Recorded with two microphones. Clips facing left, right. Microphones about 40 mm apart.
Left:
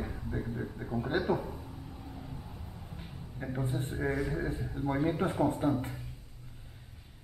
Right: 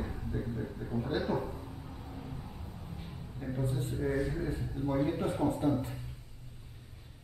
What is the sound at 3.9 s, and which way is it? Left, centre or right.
A man's voice, left.